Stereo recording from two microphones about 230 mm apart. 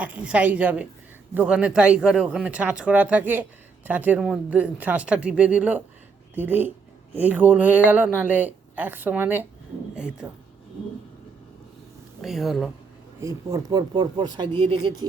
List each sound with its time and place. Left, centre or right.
0.0 s speech: centre
12.2 s speech: centre
13.1 s speech: centre